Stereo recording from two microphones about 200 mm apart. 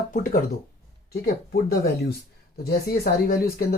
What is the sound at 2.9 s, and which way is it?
Speech, 45° left (ahead or behind).